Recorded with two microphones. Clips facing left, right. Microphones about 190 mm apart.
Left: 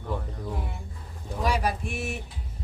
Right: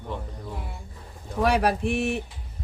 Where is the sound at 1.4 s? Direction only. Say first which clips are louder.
Right 5 dB; 65° right (ahead or behind).